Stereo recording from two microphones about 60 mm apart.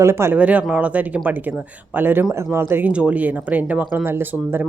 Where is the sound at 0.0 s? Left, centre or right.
Right.